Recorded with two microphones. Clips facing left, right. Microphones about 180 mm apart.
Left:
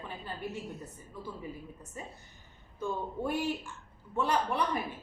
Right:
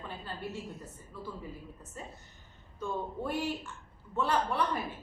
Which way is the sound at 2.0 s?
15° left (ahead or behind).